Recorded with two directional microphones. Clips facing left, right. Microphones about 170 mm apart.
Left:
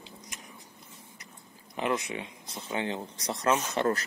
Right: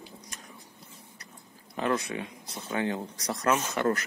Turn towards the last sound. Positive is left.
turn(degrees=25)  # may be behind; listen again after turning